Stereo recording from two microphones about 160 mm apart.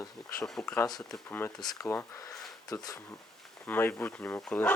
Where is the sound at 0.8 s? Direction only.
25° left (ahead or behind).